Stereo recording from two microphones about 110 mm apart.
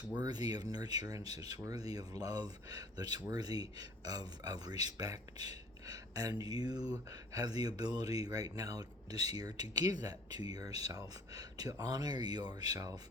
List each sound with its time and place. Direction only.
0.0 s speech: 35° right (ahead or behind)